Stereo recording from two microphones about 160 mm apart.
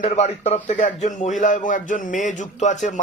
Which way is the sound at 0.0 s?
45° left (ahead or behind).